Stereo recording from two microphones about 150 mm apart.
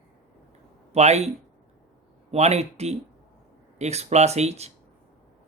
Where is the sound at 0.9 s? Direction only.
45° right (ahead or behind).